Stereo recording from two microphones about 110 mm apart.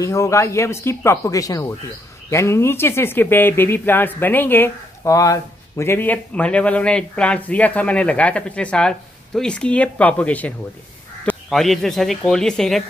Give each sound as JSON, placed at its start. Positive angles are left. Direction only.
{"t": 0.0, "sound": "speech", "side_deg": 30}
{"t": 5.0, "sound": "speech", "side_deg": 30}
{"t": 11.5, "sound": "a man's voice", "side_deg": 0}